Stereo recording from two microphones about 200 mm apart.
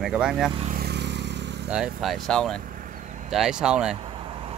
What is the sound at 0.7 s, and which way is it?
Vehicle, 50° right (ahead or behind).